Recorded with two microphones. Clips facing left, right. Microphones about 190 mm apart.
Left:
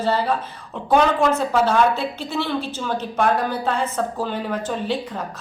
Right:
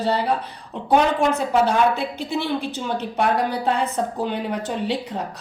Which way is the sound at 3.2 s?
20° right (ahead or behind).